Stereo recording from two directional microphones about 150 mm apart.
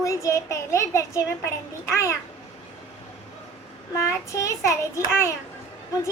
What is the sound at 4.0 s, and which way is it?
A woman's voice, 20° left (ahead or behind).